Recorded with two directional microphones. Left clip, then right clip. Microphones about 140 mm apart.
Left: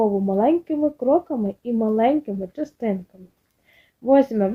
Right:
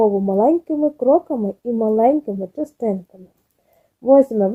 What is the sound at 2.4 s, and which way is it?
Speech, 25° right (ahead or behind).